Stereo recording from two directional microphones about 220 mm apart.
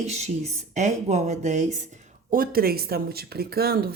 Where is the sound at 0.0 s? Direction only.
30° right (ahead or behind).